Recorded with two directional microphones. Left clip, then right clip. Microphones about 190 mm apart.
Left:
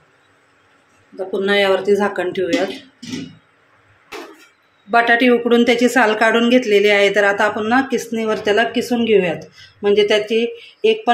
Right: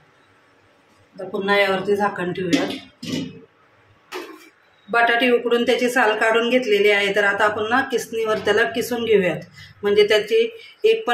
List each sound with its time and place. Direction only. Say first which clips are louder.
1.4 s speech: left 3 dB; 50° left (ahead or behind)
4.9 s speech: left 4 dB; 45° left (ahead or behind)